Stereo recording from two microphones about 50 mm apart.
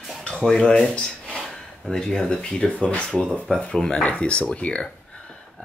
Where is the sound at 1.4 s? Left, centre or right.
Centre.